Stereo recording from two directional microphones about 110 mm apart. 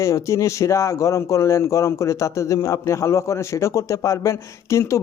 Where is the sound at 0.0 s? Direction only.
30° left (ahead or behind).